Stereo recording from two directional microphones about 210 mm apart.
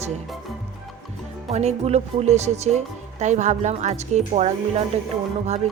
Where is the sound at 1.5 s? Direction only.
30° right (ahead or behind).